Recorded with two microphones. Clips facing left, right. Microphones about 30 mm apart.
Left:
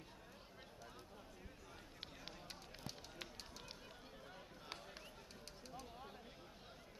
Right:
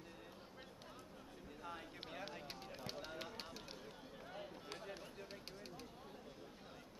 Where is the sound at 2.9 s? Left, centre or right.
Right.